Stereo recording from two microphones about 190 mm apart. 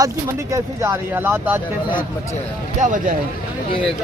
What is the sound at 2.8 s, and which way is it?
Speech, 40° right (ahead or behind).